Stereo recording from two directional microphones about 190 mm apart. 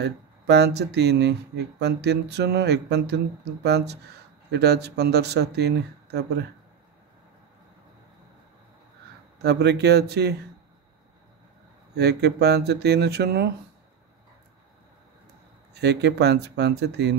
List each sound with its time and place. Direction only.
0.0 s speech: 60° right (ahead or behind)
9.4 s speech: 60° right (ahead or behind)
12.0 s speech: 60° right (ahead or behind)
15.7 s speech: 60° right (ahead or behind)